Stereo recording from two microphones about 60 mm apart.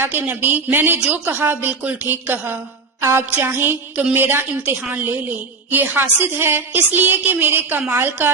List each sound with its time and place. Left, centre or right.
0.0 s a woman's voice: right
3.0 s music: right
3.4 s a woman's voice: right